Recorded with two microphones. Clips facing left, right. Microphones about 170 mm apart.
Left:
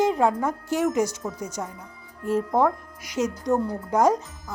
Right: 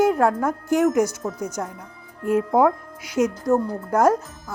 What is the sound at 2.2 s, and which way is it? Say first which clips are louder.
Speech: right 4 dB; 55° right (ahead or behind).